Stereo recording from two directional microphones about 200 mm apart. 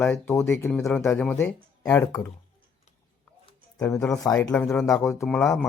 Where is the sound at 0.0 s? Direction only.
10° left (ahead or behind).